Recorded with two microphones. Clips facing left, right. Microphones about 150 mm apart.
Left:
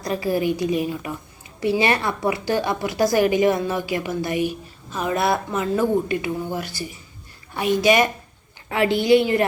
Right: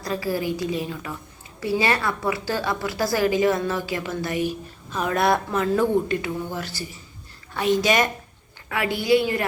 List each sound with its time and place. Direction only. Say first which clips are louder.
0.0 s a woman's voice: left 3 dB; 20° left (ahead or behind)
8.7 s a woman's voice: left 4 dB; 25° left (ahead or behind)